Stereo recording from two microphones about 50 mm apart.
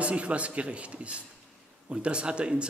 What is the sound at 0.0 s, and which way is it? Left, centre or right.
A man's voice, right.